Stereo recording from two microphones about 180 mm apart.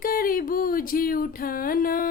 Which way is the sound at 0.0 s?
50° left (ahead or behind).